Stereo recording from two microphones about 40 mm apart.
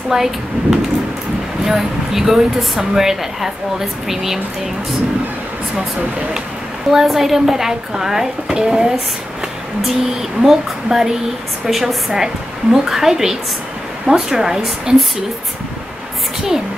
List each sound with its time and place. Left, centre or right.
0.1 s speech: centre
6.9 s speech: centre
10.4 s speech: centre